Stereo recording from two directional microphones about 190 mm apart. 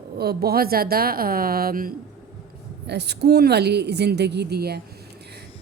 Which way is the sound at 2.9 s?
60° right (ahead or behind).